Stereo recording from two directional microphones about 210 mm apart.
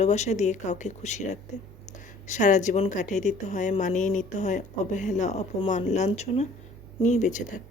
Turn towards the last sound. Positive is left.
turn(degrees=35)  # may be behind; listen again after turning